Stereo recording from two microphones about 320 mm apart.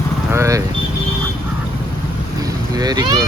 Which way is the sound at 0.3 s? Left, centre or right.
Centre.